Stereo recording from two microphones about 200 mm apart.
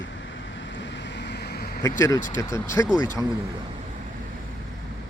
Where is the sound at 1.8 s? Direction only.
15° left (ahead or behind).